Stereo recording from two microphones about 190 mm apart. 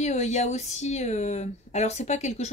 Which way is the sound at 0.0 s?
35° left (ahead or behind).